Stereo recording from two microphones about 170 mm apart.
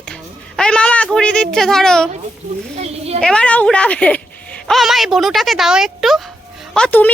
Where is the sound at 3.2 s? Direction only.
5° left (ahead or behind).